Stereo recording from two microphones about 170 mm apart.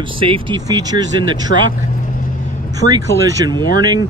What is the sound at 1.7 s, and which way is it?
Vehicle, 50° left (ahead or behind).